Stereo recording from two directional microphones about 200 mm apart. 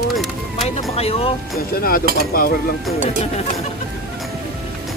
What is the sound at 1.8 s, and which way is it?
Cutlery, 45° left (ahead or behind).